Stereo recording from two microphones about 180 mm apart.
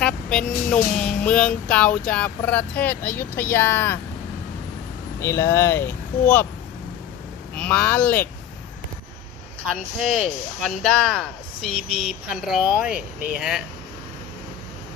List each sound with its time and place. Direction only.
0.0 s speech: 5° left (ahead or behind)
5.2 s speech: 15° left (ahead or behind)
7.5 s speech: 10° left (ahead or behind)
9.7 s speech: centre (ahead or behind)